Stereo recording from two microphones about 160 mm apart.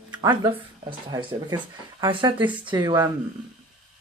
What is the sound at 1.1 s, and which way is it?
Speech, 25° right (ahead or behind).